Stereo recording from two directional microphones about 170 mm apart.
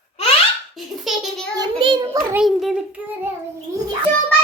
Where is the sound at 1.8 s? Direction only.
30° right (ahead or behind).